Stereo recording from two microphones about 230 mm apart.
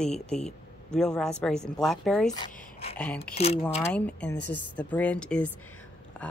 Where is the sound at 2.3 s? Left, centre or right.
Centre.